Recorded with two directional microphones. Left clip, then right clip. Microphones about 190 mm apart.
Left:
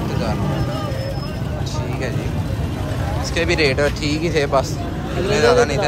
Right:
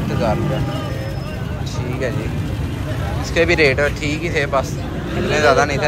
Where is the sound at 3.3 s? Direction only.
15° left (ahead or behind).